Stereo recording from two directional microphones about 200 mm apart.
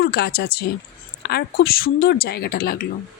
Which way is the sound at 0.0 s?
55° left (ahead or behind).